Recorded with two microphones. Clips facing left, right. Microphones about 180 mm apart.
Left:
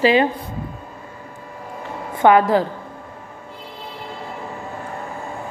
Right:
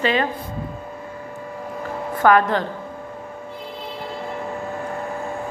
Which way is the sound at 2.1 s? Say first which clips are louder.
Left 2 dB; 25° left (ahead or behind).